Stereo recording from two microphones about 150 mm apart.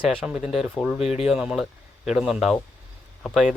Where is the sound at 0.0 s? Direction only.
5° right (ahead or behind).